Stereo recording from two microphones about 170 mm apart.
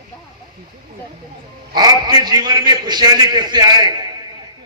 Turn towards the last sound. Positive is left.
turn(degrees=-25)  # may be behind; listen again after turning